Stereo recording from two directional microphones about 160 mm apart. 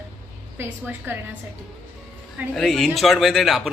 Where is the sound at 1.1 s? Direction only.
15° right (ahead or behind).